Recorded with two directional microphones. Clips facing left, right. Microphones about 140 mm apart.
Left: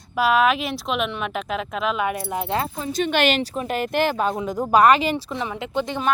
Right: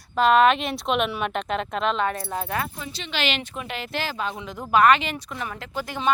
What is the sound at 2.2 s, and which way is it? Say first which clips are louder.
Speech: left 4 dB; 20° left (ahead or behind).